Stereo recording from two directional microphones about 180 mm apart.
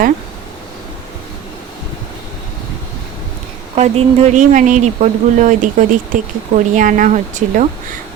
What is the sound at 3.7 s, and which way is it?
Speech, 35° right (ahead or behind).